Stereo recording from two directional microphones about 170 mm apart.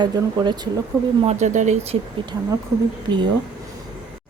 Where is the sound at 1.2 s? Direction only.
45° right (ahead or behind).